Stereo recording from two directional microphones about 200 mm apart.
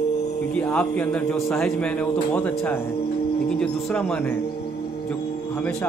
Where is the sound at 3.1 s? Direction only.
50° left (ahead or behind).